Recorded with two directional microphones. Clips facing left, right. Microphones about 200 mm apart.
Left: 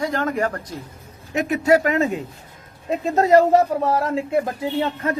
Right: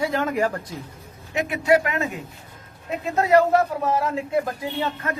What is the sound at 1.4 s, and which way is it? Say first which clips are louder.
Speech: left 2 dB; 40° left (ahead or behind).